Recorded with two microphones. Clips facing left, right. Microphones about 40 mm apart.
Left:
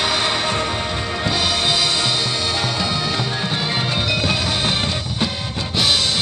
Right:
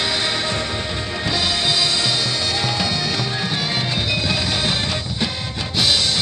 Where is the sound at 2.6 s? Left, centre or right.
Centre.